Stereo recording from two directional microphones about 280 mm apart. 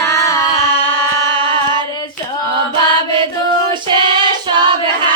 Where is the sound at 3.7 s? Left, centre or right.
Centre.